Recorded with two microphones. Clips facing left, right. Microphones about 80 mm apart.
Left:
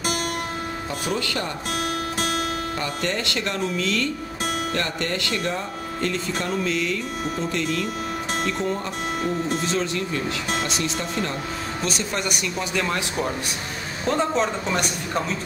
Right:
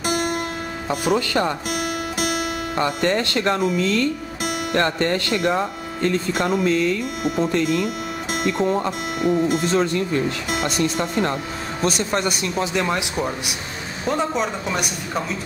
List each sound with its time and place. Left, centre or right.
1.7 s music: centre
2.8 s speech: right
6.6 s speech: right
8.5 s speech: right
9.7 s speech: right
11.8 s speech: right
14.0 s a man's voice: centre